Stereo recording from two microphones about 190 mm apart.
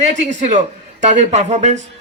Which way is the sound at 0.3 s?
40° right (ahead or behind).